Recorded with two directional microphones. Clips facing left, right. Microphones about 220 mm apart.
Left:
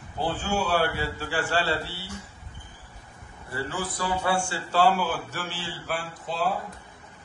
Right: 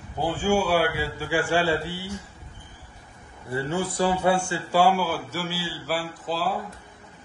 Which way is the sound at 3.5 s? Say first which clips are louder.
Right 5 dB; 25° right (ahead or behind).